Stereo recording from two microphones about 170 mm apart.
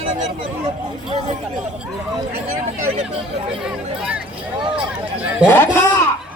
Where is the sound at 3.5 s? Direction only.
5° right (ahead or behind).